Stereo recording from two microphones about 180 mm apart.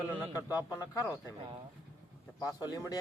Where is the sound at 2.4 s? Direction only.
20° left (ahead or behind).